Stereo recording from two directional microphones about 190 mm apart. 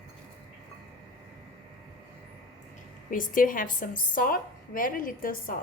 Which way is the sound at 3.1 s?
45° left (ahead or behind).